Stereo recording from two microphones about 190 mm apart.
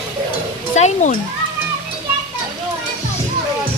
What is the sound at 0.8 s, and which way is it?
Speech, 35° left (ahead or behind).